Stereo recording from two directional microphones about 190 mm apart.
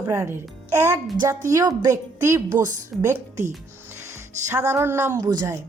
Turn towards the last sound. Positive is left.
turn(degrees=-20)  # may be behind; listen again after turning